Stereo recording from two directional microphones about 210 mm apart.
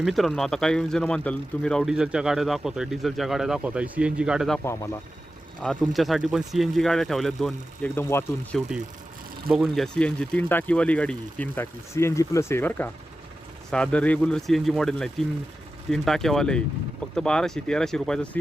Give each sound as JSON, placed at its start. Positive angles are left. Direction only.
{"t": 0.0, "sound": "speech", "side_deg": 0}
{"t": 4.6, "sound": "speech", "side_deg": 15}
{"t": 5.6, "sound": "speech", "side_deg": 0}